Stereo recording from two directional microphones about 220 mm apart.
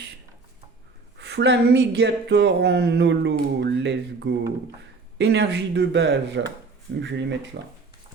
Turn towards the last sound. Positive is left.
turn(degrees=-55)  # may be behind; listen again after turning